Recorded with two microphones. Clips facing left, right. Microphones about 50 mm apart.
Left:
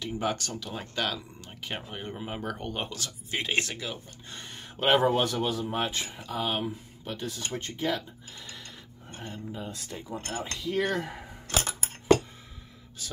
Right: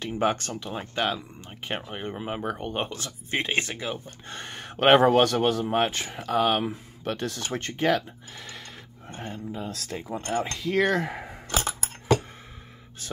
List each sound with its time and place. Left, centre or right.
0.0 s speech: right
4.3 s speech: right
9.1 s speech: right
9.5 s speech: right
10.1 s speech: right
10.6 s speech: right